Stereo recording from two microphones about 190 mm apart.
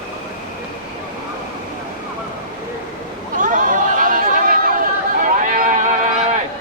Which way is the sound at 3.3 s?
45° right (ahead or behind).